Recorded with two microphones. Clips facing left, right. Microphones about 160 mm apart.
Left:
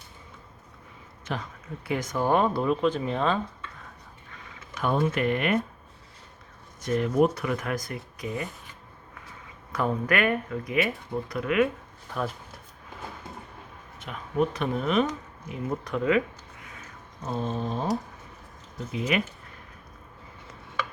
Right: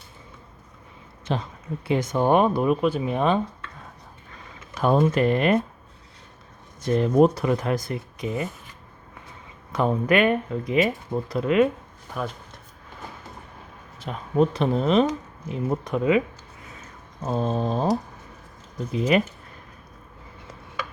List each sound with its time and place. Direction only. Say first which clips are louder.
1.2 s speech: right 6 dB; 25° right (ahead or behind)
4.7 s speech: right 5 dB; 35° right (ahead or behind)
6.8 s speech: right 5 dB; 30° right (ahead or behind)
9.7 s speech: right 5 dB; 25° right (ahead or behind)
14.0 s speech: right 5 dB; 30° right (ahead or behind)
17.2 s speech: right 5 dB; 40° right (ahead or behind)